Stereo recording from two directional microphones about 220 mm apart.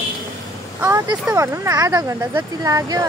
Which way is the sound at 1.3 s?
15° right (ahead or behind).